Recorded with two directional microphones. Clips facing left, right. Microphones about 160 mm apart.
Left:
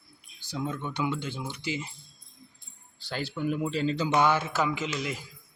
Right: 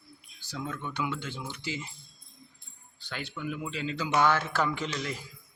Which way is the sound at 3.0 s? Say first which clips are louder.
Left 6 dB; 35° left (ahead or behind).